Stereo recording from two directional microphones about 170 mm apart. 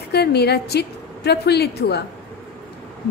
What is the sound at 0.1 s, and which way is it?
A woman's voice, 75° left (ahead or behind).